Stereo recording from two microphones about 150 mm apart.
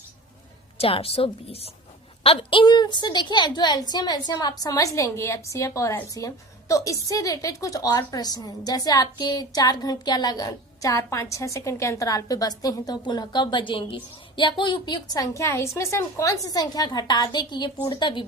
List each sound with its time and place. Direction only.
0.8 s a woman's voice: 40° left (ahead or behind)